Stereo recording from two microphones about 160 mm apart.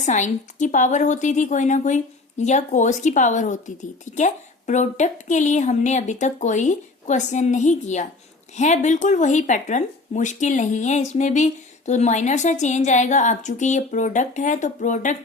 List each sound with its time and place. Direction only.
0.0 s speech: 50° left (ahead or behind)